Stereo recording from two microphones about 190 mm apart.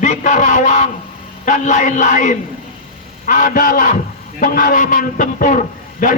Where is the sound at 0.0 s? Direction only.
40° left (ahead or behind).